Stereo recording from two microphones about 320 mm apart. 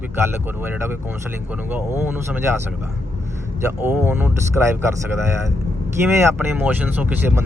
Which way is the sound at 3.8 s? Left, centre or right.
Centre.